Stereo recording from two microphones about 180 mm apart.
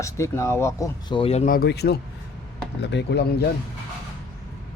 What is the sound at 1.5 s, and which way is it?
Speech, 60° left (ahead or behind).